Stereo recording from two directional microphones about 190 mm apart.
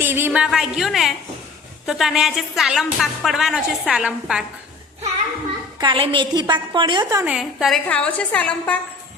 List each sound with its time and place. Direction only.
0.0 s speech: 10° right (ahead or behind)
5.8 s a woman's voice: 25° right (ahead or behind)
7.3 s a woman's voice: centre (ahead or behind)